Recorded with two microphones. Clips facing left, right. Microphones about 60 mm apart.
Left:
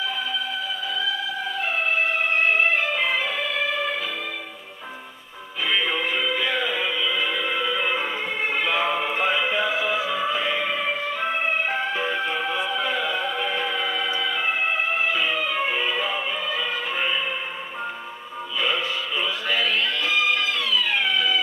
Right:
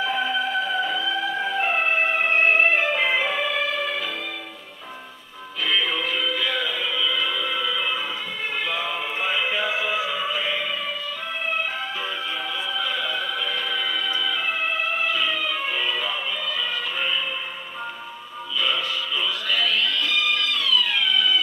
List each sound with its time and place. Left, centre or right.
0.0 s music: right
1.6 s music: right
2.3 s music: right
3.0 s music: centre
5.7 s music: centre
5.9 s music: left
9.3 s music: left
9.6 s music: centre
10.1 s music: left
10.6 s music: left
18.6 s music: left